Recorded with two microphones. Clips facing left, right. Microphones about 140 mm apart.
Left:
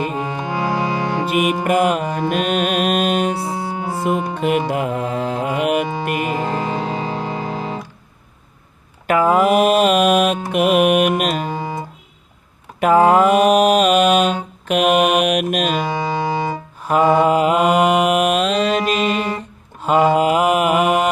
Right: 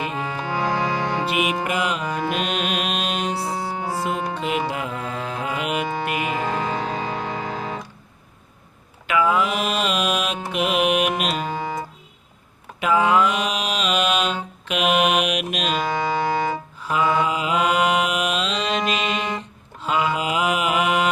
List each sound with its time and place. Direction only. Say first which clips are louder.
0.2 s music: left 3 dB; 20° left (ahead or behind)
1.3 s music: left 6 dB; 45° left (ahead or behind)
3.3 s music: left 3 dB; 20° left (ahead or behind)
4.4 s music: left 6 dB; 50° left (ahead or behind)
6.4 s music: left 3 dB; 10° left (ahead or behind)
7.1 s music: left 3 dB; 30° left (ahead or behind)
9.0 s mantra: left 6 dB; 45° left (ahead or behind)
12.8 s mantra: left 6 dB; 45° left (ahead or behind)
15.8 s music: left 2 dB; 15° left (ahead or behind)
16.8 s mantra: left 7 dB; 50° left (ahead or behind)